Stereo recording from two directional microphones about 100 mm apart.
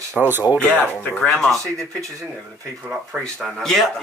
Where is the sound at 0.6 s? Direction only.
15° left (ahead or behind).